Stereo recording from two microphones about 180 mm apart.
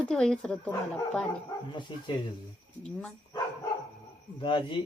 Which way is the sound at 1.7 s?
25° left (ahead or behind).